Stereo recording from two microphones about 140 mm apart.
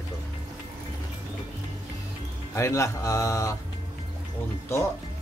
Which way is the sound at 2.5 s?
20° left (ahead or behind).